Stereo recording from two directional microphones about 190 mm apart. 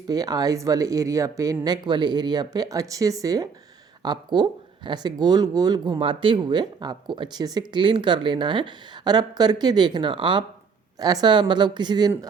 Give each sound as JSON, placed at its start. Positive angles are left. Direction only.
{"t": 0.1, "sound": "speech", "side_deg": -20}